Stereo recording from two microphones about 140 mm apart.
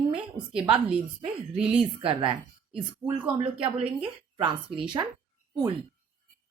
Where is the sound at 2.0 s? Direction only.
40° right (ahead or behind).